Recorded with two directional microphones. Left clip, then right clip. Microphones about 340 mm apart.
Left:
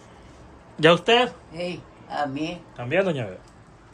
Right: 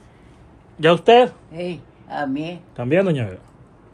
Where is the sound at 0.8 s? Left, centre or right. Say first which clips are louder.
Right 5 dB; centre.